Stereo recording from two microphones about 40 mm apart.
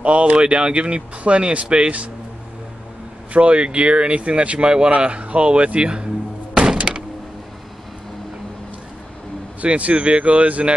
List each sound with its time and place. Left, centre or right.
0.0 s speech: right
3.3 s speech: right
6.9 s door: right
9.6 s speech: right